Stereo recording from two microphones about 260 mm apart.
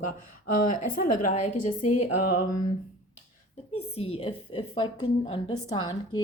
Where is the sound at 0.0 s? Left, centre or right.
Left.